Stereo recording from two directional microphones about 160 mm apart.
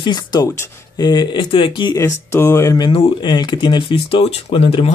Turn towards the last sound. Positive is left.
turn(degrees=35)  # may be behind; listen again after turning